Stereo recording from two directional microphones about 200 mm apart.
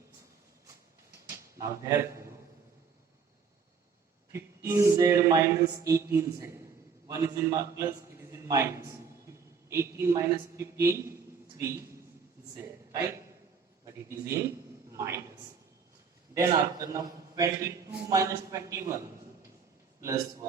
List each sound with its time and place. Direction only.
1.5 s speech: 15° right (ahead or behind)
4.3 s a man's voice: 15° right (ahead or behind)
14.9 s speech: 15° right (ahead or behind)
16.3 s speech: 15° right (ahead or behind)